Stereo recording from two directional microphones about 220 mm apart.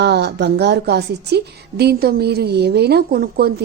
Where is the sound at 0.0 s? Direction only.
50° right (ahead or behind).